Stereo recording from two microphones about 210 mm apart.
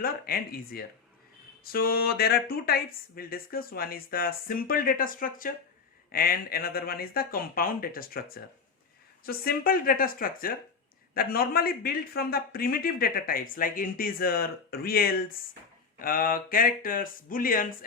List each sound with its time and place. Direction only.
0.0 s a man's voice: 45° left (ahead or behind)